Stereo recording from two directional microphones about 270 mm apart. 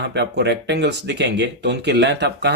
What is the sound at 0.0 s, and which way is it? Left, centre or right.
Speech, right.